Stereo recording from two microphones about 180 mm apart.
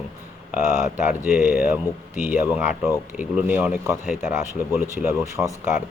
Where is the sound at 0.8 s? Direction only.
45° left (ahead or behind).